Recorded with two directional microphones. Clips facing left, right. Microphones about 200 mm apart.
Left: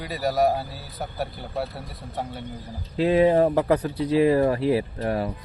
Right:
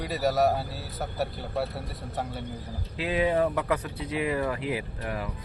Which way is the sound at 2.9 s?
35° left (ahead or behind).